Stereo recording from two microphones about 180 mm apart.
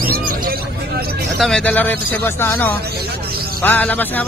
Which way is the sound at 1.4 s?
5° left (ahead or behind).